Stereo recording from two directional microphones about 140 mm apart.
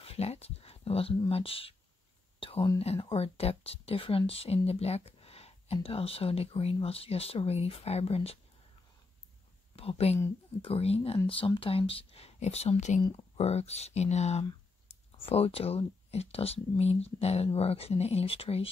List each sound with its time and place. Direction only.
0.0 s speech: 45° left (ahead or behind)
2.4 s whispering: 40° left (ahead or behind)
2.8 s speech: 45° left (ahead or behind)
9.8 s speech: 45° left (ahead or behind)